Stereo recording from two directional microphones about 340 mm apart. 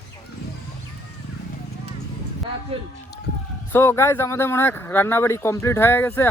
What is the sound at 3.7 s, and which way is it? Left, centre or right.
Speech, centre.